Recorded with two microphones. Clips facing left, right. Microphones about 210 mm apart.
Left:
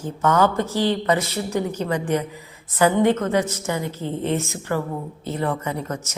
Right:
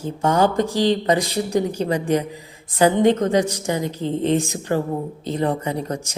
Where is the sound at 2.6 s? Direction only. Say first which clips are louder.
Right 2 dB; 15° right (ahead or behind).